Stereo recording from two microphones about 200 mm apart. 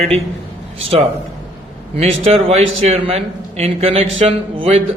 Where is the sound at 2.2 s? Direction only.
30° right (ahead or behind).